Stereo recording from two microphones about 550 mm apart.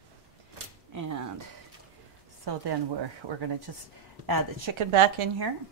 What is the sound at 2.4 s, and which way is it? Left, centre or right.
Speech, right.